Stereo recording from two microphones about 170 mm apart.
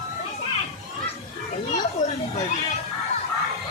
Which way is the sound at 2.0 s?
50° left (ahead or behind).